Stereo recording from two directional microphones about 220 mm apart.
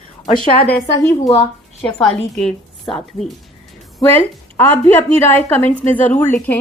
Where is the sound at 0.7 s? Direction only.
5° left (ahead or behind).